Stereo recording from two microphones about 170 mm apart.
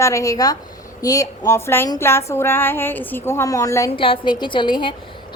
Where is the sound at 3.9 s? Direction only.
30° left (ahead or behind).